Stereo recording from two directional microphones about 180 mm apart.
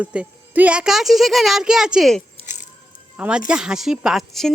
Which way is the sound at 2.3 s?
40° left (ahead or behind).